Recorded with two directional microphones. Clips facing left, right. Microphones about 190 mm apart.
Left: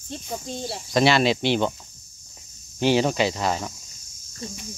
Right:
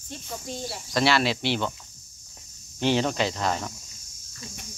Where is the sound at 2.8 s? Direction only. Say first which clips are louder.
Left 4 dB; 10° left (ahead or behind).